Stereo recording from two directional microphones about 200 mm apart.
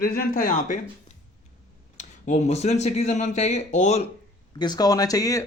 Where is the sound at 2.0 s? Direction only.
35° left (ahead or behind).